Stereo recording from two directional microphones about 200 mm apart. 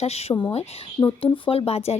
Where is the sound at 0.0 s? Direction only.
30° left (ahead or behind).